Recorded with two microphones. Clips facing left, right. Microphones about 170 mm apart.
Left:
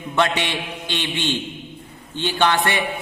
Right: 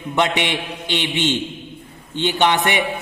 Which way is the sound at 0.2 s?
20° right (ahead or behind).